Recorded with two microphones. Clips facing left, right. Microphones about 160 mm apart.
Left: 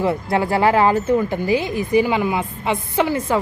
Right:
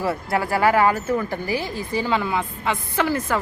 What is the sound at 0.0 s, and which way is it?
Speech, 20° left (ahead or behind).